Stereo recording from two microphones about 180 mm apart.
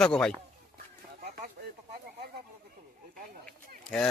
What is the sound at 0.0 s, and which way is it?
Speech, 5° left (ahead or behind).